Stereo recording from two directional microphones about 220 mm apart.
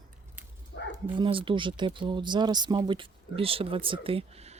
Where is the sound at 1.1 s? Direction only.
25° right (ahead or behind).